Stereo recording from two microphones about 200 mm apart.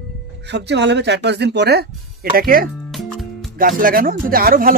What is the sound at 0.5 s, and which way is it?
Speech, 60° right (ahead or behind).